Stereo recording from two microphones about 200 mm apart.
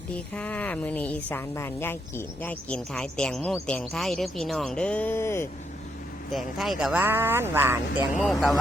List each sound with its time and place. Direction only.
0.3 s speech: 5° left (ahead or behind)
6.3 s speech: centre (ahead or behind)
8.2 s speech: centre (ahead or behind)